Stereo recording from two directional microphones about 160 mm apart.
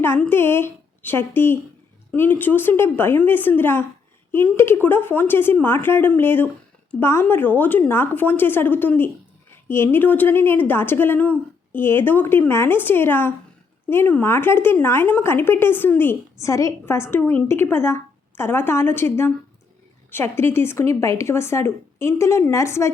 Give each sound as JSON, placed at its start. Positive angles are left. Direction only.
{"t": 0.0, "sound": "a woman's voice", "side_deg": 15}